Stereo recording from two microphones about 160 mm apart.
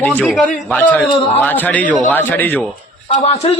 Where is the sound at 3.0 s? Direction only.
40° left (ahead or behind).